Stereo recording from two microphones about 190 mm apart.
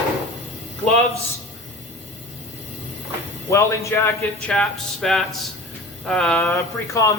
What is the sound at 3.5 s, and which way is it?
A man's voice, 15° left (ahead or behind).